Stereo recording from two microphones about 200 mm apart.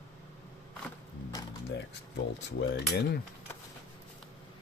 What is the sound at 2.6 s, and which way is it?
Speech, 55° left (ahead or behind).